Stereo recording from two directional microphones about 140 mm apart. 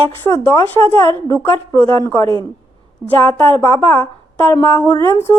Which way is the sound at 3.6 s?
25° left (ahead or behind).